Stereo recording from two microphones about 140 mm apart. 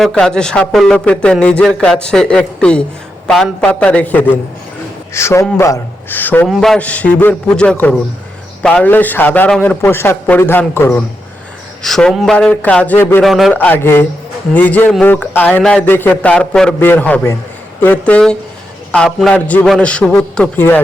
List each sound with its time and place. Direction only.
0.0 s a man's voice: 5° left (ahead or behind)
6.5 s a man's voice: centre (ahead or behind)
11.8 s a man's voice: 5° left (ahead or behind)
13.2 s a man's voice: centre (ahead or behind)
13.5 s a man's voice: 10° left (ahead or behind)